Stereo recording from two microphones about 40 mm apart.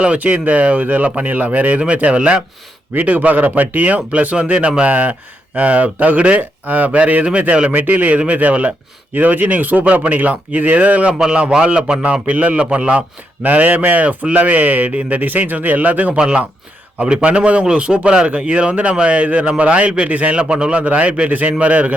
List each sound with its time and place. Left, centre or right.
0.2 s speech: right
2.9 s speech: right
4.9 s speech: right
11.1 s speech: right
12.2 s speech: right
13.4 s speech: right
15.2 s speech: right
17.0 s speech: right
20.1 s speech: right
20.3 s speech: right